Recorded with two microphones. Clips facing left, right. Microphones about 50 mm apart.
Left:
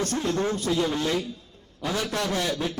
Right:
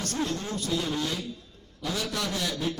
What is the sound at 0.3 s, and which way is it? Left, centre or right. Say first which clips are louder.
A man's voice: left 6 dB; left.